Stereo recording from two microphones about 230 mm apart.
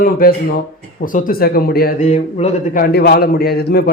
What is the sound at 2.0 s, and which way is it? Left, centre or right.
Speech, left.